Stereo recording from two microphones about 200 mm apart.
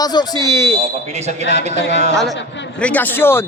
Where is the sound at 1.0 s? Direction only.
35° right (ahead or behind).